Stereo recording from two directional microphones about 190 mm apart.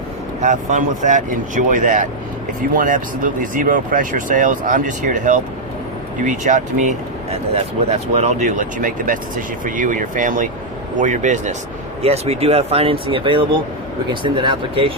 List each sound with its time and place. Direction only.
0.4 s speech: 40° right (ahead or behind)